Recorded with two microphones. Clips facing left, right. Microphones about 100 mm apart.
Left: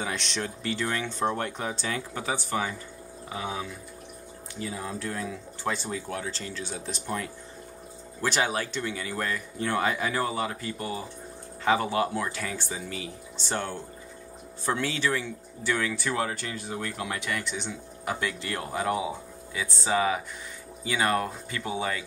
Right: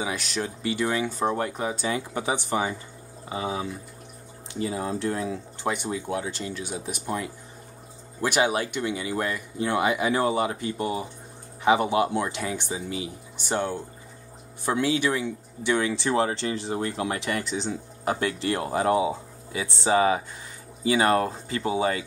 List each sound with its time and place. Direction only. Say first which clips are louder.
0.0 s speech: right 2 dB; 5° right (ahead or behind)
1.9 s speech: right 4 dB; 15° right (ahead or behind)